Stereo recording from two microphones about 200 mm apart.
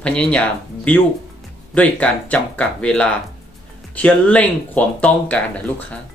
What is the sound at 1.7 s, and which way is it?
Speech, 5° left (ahead or behind).